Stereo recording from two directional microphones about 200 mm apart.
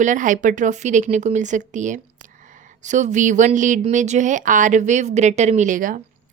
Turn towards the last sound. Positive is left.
turn(degrees=-40)  # may be behind; listen again after turning